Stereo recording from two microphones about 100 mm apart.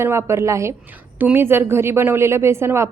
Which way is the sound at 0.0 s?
25° right (ahead or behind).